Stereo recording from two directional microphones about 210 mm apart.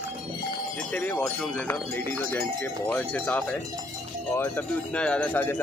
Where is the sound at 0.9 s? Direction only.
10° left (ahead or behind).